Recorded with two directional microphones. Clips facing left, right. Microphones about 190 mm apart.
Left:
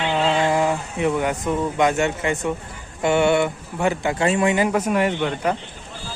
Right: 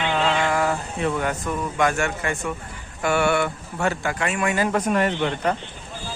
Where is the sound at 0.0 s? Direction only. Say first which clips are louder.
Left 2 dB; 15° left (ahead or behind).